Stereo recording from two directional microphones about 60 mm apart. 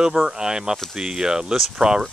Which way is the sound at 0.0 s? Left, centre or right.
Centre.